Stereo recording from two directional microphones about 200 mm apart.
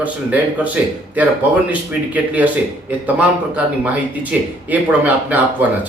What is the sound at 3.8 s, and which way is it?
Speech, 10° right (ahead or behind).